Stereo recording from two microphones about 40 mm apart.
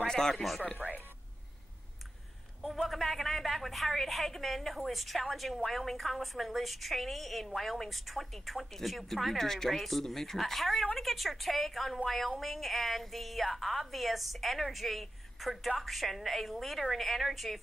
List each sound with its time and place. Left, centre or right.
0.0 s speech: centre
0.8 s a woman's voice: centre
2.9 s a woman's voice: centre